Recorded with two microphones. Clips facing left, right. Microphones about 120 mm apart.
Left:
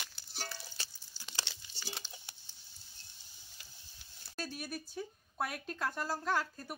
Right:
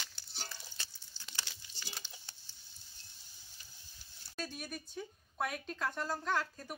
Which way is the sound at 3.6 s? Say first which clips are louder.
Left 2 dB; 85° left.